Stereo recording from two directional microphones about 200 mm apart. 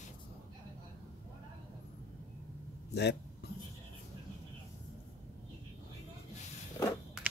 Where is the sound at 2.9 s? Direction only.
55° left (ahead or behind).